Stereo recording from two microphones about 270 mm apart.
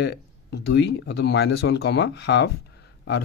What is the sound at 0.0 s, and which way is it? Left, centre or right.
Speech, left.